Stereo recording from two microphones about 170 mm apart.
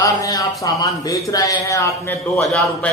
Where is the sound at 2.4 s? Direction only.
5° left (ahead or behind).